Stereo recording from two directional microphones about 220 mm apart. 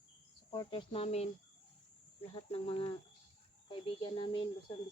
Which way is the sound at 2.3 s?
25° left (ahead or behind).